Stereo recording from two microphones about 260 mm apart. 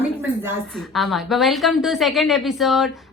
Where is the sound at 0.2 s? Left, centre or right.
Centre.